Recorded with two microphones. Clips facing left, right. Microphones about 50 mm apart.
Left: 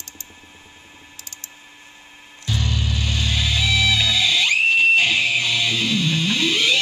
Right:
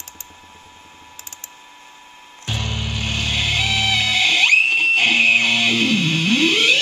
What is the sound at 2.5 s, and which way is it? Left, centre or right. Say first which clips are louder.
Music: left 1 dB; right.